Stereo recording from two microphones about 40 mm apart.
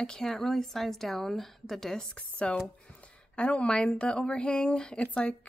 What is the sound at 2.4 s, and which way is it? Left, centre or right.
A woman's voice, left.